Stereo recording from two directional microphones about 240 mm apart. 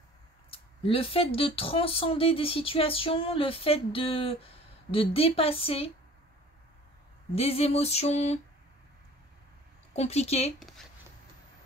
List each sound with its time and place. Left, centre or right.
0.5 s speech: left
7.3 s speech: left
9.9 s speech: left